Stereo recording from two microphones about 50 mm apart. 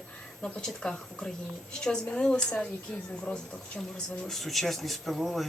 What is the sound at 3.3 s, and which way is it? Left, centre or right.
Speech, left.